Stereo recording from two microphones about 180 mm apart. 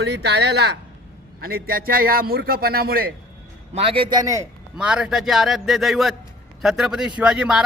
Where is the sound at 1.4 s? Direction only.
55° right (ahead or behind).